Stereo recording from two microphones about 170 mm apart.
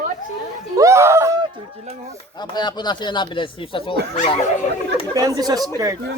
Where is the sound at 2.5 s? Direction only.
25° left (ahead or behind).